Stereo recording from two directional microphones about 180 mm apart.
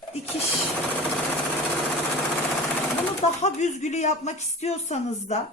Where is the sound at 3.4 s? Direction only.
40° left (ahead or behind).